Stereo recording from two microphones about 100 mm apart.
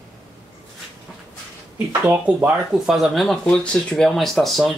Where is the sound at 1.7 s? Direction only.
20° right (ahead or behind).